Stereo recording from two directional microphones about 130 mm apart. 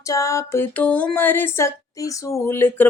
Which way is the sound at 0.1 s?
25° left (ahead or behind).